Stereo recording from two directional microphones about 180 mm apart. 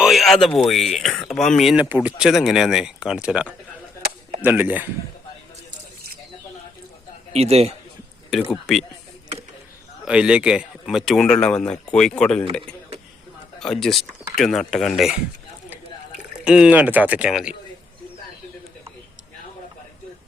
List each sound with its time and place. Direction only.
0.0 s speech: centre (ahead or behind)
4.4 s speech: 10° right (ahead or behind)
7.3 s a man's voice: 35° right (ahead or behind)
8.3 s speech: centre (ahead or behind)
10.1 s speech: 5° right (ahead or behind)
13.6 s speech: centre (ahead or behind)
16.4 s speech: 5° right (ahead or behind)